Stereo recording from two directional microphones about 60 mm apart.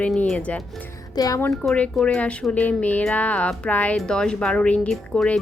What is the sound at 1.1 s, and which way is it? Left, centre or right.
Speech, left.